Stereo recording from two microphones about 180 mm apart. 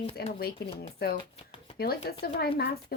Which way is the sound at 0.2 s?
60° left (ahead or behind).